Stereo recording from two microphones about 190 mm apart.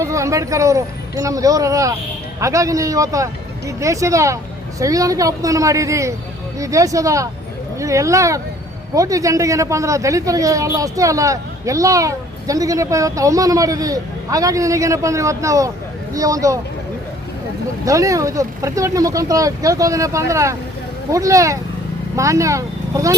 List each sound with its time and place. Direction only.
0.0 s speech: 15° right (ahead or behind)
17.8 s speech: 15° right (ahead or behind)